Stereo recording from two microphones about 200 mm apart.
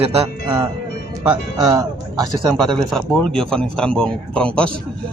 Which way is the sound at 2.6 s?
Centre (ahead or behind).